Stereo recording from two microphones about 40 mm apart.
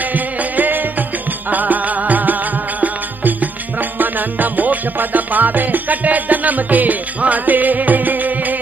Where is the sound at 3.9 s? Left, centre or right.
Right.